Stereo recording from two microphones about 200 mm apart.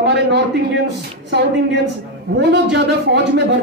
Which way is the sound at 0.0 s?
55° right (ahead or behind).